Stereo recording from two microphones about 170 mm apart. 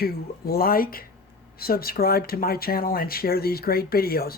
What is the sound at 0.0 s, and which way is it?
Speech, 65° left (ahead or behind).